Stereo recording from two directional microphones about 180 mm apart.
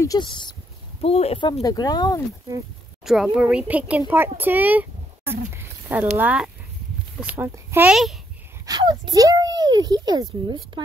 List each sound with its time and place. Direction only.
0.0 s speech: 25° left (ahead or behind)
1.5 s speech: 20° left (ahead or behind)
3.3 s a woman's voice: 5° right (ahead or behind)
7.9 s a child's voice: centre (ahead or behind)
8.6 s speech: 25° right (ahead or behind)